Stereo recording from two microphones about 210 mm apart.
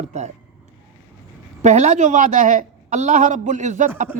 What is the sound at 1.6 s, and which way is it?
A man's voice, 35° right (ahead or behind).